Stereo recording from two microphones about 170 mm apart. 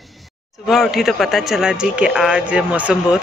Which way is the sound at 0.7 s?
Centre (ahead or behind).